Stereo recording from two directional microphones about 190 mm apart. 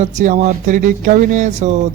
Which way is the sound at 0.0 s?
40° right (ahead or behind).